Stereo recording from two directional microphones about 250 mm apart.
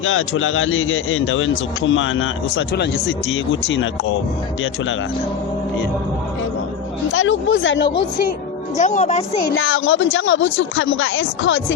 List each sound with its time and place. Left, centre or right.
0.0 s a man's voice: left
7.1 s speech: left
8.8 s speech: left
9.5 s speech: left